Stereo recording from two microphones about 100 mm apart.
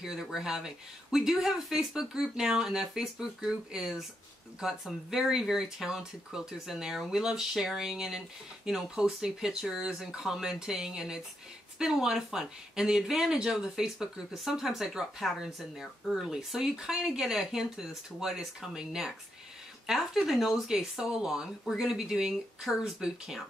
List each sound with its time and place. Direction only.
0.0 s speech: 5° right (ahead or behind)